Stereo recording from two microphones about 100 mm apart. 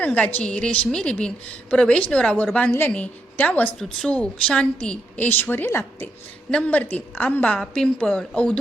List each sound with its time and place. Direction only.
0.0 s a woman's voice: 15° left (ahead or behind)